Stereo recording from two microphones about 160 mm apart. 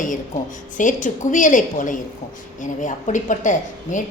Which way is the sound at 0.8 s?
55° left (ahead or behind).